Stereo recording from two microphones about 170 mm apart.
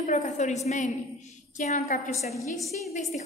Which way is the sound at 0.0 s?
45° left (ahead or behind).